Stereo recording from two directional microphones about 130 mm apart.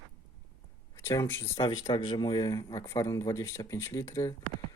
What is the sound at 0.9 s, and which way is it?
Speech, 25° left (ahead or behind).